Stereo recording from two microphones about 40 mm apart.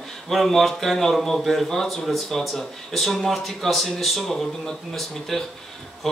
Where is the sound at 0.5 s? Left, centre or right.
Centre.